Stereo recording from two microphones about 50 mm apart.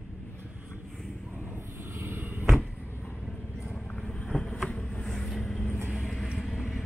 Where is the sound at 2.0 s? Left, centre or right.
Right.